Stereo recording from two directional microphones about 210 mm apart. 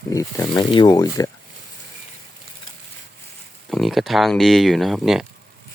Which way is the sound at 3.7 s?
Centre (ahead or behind).